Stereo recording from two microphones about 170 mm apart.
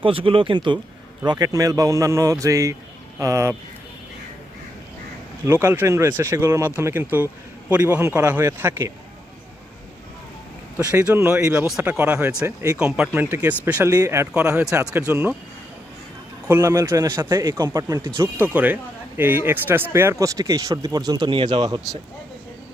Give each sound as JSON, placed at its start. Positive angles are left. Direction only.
{"t": 0.0, "sound": "speech", "side_deg": -30}
{"t": 5.5, "sound": "speech", "side_deg": -15}
{"t": 10.8, "sound": "speech", "side_deg": -10}
{"t": 16.5, "sound": "speech", "side_deg": -15}